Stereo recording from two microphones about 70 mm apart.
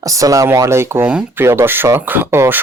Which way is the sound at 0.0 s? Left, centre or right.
Right.